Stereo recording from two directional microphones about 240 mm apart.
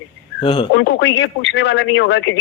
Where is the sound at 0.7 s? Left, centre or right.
Left.